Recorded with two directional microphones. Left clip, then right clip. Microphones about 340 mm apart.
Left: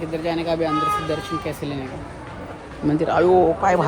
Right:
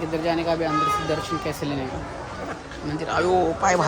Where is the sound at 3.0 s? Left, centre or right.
Centre.